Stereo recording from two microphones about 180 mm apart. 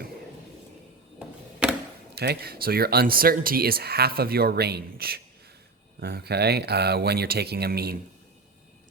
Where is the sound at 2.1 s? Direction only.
60° right (ahead or behind).